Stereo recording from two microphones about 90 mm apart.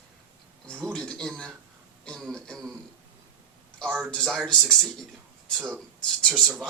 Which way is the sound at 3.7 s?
10° left (ahead or behind).